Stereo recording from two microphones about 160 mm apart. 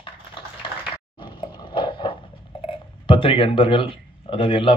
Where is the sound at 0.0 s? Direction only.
30° left (ahead or behind).